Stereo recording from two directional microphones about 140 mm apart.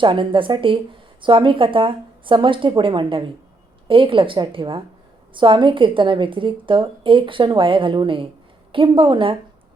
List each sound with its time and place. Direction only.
0.0 s a woman's voice: 35° right (ahead or behind)